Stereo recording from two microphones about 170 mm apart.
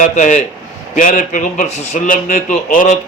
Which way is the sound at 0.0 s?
45° left (ahead or behind).